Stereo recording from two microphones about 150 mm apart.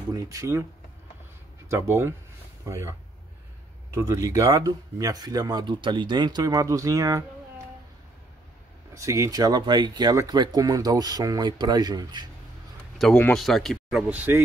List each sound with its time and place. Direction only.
0.1 s speech: 20° right (ahead or behind)
1.7 s speech: 20° right (ahead or behind)
8.9 s speech: 20° right (ahead or behind)
12.9 s a sound: centre (ahead or behind)
13.2 s speech: 5° left (ahead or behind)
14.0 s speech: 15° right (ahead or behind)